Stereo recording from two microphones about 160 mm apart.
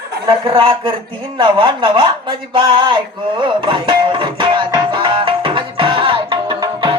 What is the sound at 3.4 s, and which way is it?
Music, 30° right (ahead or behind).